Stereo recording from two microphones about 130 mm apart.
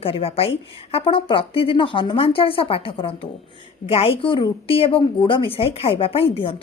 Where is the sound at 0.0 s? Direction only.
45° left (ahead or behind).